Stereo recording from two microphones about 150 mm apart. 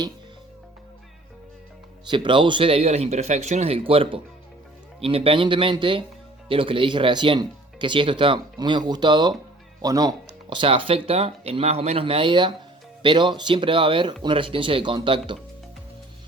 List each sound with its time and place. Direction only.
2.0 s speech: 30° right (ahead or behind)
10.5 s speech: 35° right (ahead or behind)